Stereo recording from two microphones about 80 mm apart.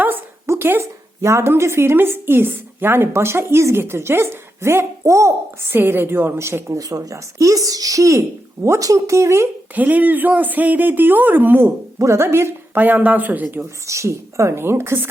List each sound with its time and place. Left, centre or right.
0.4 s speech: right
9.7 s speech: centre
11.9 s speech: right
13.8 s speech: right